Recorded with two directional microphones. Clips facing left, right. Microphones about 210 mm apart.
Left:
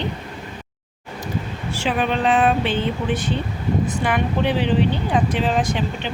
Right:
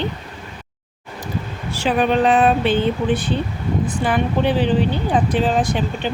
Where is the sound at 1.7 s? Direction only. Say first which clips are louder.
Right 5 dB; 40° right (ahead or behind).